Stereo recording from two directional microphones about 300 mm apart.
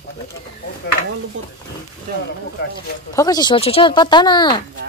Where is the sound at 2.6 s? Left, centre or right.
Left.